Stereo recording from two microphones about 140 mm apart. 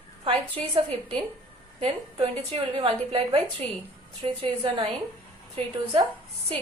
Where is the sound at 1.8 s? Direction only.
50° right (ahead or behind).